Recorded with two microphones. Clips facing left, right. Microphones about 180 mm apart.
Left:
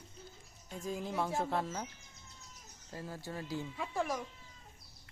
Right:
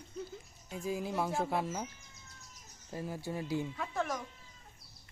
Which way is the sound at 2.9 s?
15° right (ahead or behind).